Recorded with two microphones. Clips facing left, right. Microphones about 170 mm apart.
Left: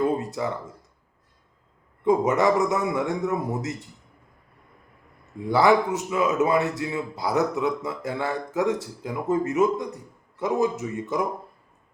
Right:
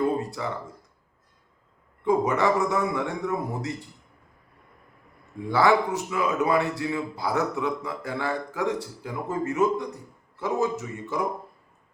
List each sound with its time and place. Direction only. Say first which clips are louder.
0.2 s a sound: left 2 dB; 20° left (ahead or behind)
2.0 s a man's voice: left 2 dB; 20° left (ahead or behind)
5.5 s a man's voice: left 2 dB; 20° left (ahead or behind)